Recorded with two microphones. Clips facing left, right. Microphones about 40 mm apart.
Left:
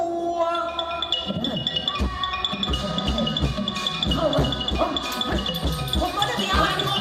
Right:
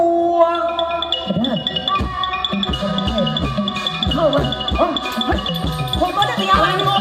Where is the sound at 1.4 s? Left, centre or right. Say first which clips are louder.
Right 6 dB; right.